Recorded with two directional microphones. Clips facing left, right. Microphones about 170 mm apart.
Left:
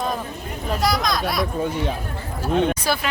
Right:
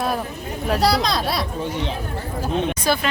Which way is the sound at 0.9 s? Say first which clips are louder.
Even; 30° right (ahead or behind).